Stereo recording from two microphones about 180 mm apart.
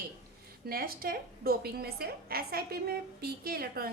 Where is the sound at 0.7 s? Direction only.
55° right (ahead or behind).